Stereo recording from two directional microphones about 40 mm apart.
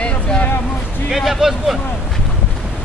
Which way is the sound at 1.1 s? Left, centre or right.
Centre.